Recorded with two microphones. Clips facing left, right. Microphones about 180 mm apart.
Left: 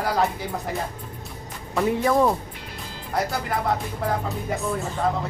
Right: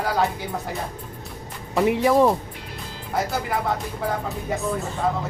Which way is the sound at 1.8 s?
15° right (ahead or behind).